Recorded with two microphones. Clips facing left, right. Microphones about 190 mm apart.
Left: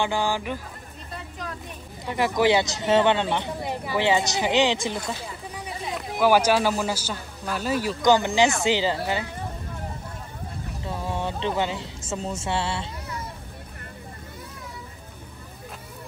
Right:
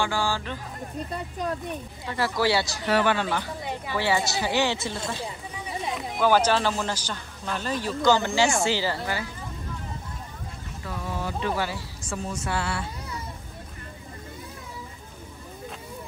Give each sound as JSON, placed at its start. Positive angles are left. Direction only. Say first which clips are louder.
{"t": 0.0, "sound": "speech", "louder": "left 2 dB", "side_deg": 20}
{"t": 2.0, "sound": "speech", "louder": "left 4 dB", "side_deg": 15}
{"t": 5.9, "sound": "speech", "louder": "left 2 dB", "side_deg": 10}
{"t": 10.8, "sound": "speech", "louder": "left 3 dB", "side_deg": 30}